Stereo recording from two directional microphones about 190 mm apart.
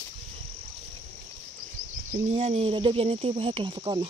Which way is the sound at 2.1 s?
35° right (ahead or behind).